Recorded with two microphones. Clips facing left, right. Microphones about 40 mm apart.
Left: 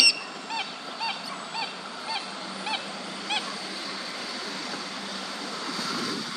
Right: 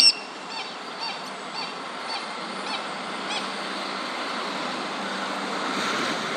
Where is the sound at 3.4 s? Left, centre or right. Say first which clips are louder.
Right 5 dB; right.